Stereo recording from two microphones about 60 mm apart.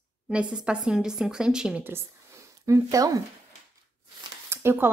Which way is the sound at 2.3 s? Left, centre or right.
Right.